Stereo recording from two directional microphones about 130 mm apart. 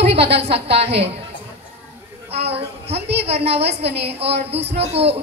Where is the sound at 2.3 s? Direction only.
55° right (ahead or behind).